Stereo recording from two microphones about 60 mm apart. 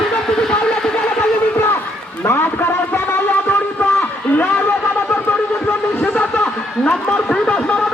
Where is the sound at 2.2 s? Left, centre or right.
Left.